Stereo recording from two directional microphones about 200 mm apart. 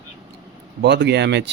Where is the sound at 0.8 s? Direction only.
60° right (ahead or behind).